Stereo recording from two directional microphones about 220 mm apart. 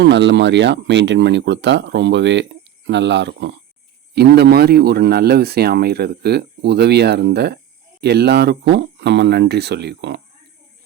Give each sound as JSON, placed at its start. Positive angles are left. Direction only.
{"t": 0.0, "sound": "speech", "side_deg": -55}